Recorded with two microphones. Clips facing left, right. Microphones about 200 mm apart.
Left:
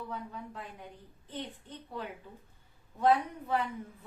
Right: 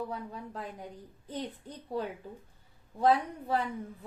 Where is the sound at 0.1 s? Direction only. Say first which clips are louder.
Right 2 dB; 35° right (ahead or behind).